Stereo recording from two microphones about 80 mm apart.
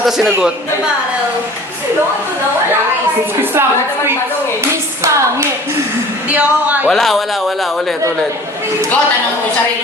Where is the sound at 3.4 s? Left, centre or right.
Right.